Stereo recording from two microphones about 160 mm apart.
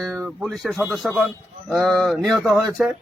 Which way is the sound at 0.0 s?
5° left (ahead or behind).